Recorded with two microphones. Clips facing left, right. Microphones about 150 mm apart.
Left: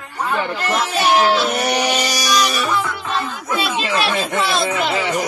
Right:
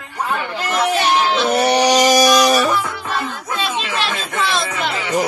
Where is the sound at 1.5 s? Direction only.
30° right (ahead or behind).